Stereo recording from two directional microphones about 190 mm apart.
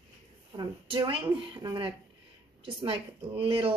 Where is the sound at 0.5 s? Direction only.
25° right (ahead or behind).